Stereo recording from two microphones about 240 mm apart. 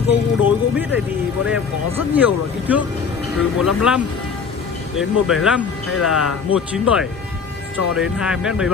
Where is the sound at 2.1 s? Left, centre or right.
Centre.